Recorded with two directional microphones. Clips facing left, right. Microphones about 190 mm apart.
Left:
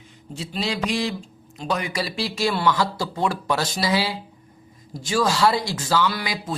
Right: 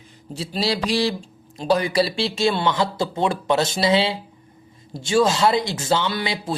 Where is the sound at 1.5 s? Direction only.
35° right (ahead or behind).